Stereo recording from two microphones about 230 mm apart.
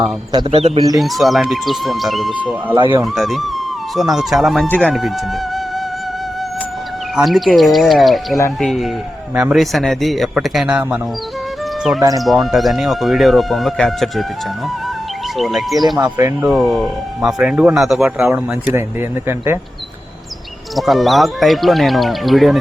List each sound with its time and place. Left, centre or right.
0.0 s speech: right
0.9 s speech: centre
2.7 s speech: centre
3.0 s speech: centre
7.2 s speech: centre
11.9 s speech: centre
12.2 s speech: centre
15.4 s speech: centre
16.0 s speech: centre
20.7 s speech: centre